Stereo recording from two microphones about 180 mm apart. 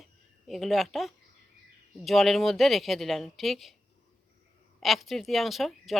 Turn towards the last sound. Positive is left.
turn(degrees=0)  # may be behind; listen again after turning